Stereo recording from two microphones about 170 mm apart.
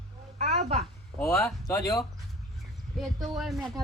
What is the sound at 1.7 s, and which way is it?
Speech, 20° left (ahead or behind).